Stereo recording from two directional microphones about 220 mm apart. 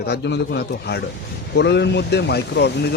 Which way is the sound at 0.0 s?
50° left (ahead or behind).